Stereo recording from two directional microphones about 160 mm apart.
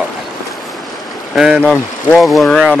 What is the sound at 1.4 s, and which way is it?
Speech, 5° right (ahead or behind).